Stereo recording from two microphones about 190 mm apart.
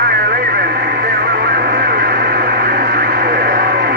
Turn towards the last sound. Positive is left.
turn(degrees=-55)  # may be behind; listen again after turning